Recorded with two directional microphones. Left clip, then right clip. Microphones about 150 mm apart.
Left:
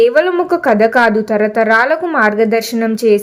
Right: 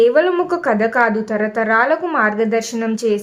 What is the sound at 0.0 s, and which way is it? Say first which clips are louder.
A woman's voice: left 2 dB; 25° left (ahead or behind).